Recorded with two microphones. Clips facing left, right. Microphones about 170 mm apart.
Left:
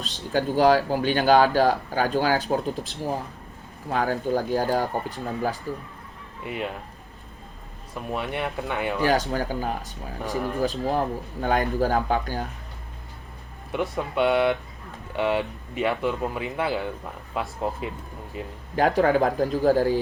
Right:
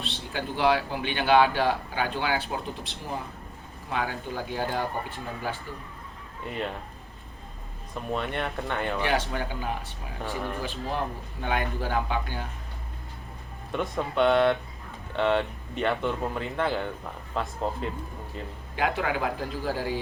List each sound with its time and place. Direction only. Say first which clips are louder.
0.0 s speech: left 7 dB; 40° left (ahead or behind)
6.4 s speech: left 2 dB; 5° left (ahead or behind)
8.1 s speech: left 2 dB; 5° left (ahead or behind)
9.0 s speech: left 8 dB; 40° left (ahead or behind)
13.7 s speech: left 1 dB; 5° left (ahead or behind)
18.8 s speech: left 8 dB; 40° left (ahead or behind)